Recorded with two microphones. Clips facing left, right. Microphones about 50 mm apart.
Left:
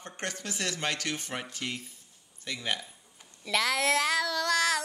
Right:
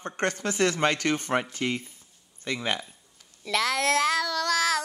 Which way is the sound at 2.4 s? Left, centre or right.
Right.